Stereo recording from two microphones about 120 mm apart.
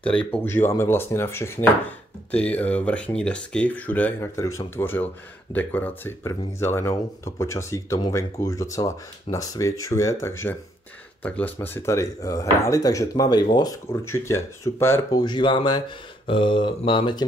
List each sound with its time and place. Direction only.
0.0 s speech: 10° left (ahead or behind)
4.4 s speech: 25° left (ahead or behind)
14.1 s speech: 25° left (ahead or behind); by 17.2 s 45° left (ahead or behind)